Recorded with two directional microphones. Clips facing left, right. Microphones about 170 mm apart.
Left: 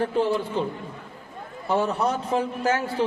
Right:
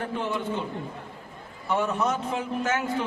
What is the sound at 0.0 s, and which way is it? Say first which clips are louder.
Speech: left 6 dB; 30° left (ahead or behind).